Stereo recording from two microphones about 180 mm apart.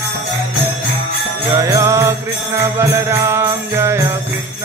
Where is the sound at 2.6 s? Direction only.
15° right (ahead or behind).